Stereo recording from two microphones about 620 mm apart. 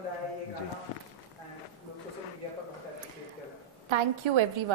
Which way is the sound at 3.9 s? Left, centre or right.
Right.